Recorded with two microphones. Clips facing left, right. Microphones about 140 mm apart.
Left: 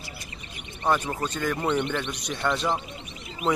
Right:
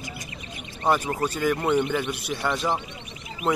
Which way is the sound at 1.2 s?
5° right (ahead or behind).